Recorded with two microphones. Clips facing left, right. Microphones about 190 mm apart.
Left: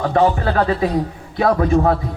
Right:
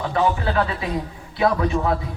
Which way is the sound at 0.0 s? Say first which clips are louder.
Left 5 dB; 45° left (ahead or behind).